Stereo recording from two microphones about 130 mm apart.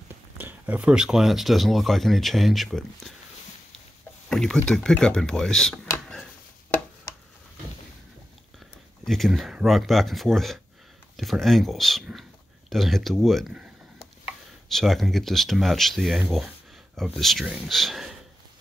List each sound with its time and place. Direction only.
0.4 s speech: 10° right (ahead or behind)
4.3 s speech: 5° left (ahead or behind)
9.0 s speech: centre (ahead or behind)